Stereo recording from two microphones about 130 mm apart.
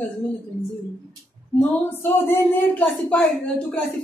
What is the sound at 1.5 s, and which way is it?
A woman's voice, 15° left (ahead or behind).